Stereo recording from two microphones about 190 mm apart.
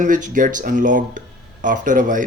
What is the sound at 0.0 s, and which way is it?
A man's voice, 45° right (ahead or behind).